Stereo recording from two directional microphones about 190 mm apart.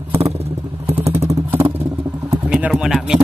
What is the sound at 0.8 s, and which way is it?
Vehicle, 30° right (ahead or behind).